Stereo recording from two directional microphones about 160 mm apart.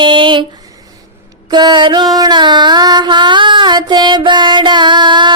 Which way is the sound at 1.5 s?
25° right (ahead or behind).